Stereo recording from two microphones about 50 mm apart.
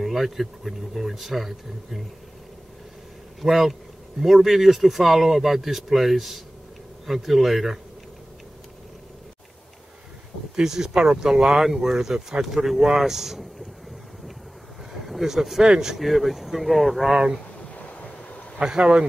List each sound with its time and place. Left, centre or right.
0.0 s speech: centre
3.3 s speech: centre
10.5 s speech: centre
14.9 s a sound: centre
15.7 s speech: centre
16.0 s speech: centre
17.1 s speech: centre
17.7 s vehicle: left
18.6 s speech: centre